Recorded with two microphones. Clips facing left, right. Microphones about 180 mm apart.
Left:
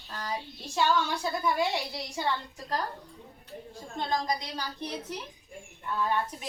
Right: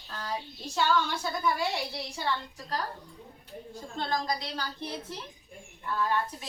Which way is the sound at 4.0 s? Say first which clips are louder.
Left 1 dB; 15° left (ahead or behind).